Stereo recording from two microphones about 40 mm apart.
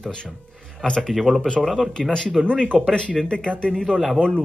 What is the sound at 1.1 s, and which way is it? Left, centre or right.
Speech, centre.